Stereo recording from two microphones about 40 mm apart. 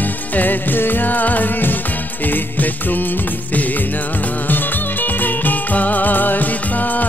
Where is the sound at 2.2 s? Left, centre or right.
Left.